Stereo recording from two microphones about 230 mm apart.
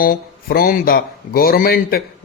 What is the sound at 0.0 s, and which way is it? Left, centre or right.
Speech, left.